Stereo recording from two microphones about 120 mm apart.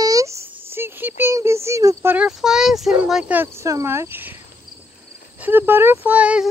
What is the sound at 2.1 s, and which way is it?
Speech, 5° right (ahead or behind).